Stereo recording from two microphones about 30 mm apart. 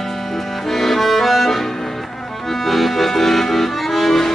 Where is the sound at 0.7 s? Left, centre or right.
Centre.